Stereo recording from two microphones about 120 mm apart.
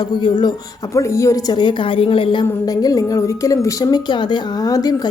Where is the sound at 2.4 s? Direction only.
30° left (ahead or behind).